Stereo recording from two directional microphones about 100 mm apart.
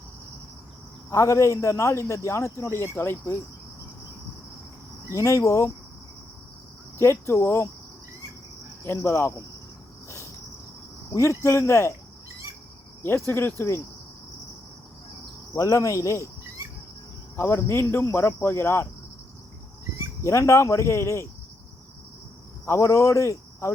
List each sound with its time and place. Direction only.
1.1 s speech: 30° left (ahead or behind)
5.1 s speech: 30° left (ahead or behind)
7.0 s speech: 30° left (ahead or behind)
8.8 s speech: 25° left (ahead or behind)
11.1 s speech: 30° left (ahead or behind)
13.0 s speech: 25° left (ahead or behind)
15.5 s speech: 30° left (ahead or behind)
17.3 s speech: 25° left (ahead or behind)
20.2 s speech: 30° left (ahead or behind)
22.6 s speech: 25° left (ahead or behind)